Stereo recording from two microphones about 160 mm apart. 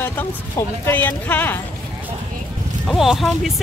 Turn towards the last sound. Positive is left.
turn(degrees=0)  # may be behind; listen again after turning